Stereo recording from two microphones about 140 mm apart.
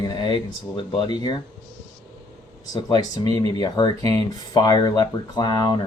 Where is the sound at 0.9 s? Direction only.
30° left (ahead or behind).